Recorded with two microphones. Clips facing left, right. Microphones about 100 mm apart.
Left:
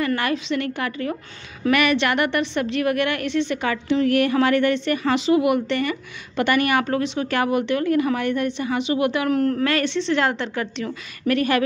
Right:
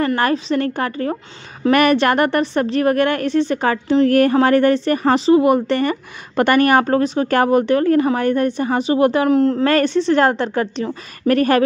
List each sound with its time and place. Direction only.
0.0 s a woman's voice: 40° right (ahead or behind)
9.3 s a woman's voice: 25° right (ahead or behind)
9.7 s a woman's voice: 40° right (ahead or behind)